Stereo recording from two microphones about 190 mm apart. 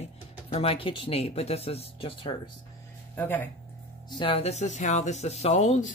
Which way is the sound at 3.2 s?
10° left (ahead or behind).